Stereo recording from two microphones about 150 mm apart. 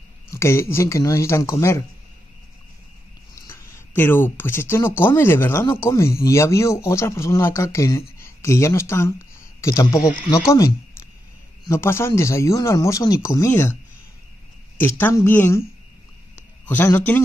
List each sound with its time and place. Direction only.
0.3 s speech: 15° left (ahead or behind)
3.3 s speech: 20° left (ahead or behind)
11.6 s a man's voice: 15° left (ahead or behind)
14.8 s a man's voice: 15° left (ahead or behind)
16.6 s a man's voice: 15° left (ahead or behind)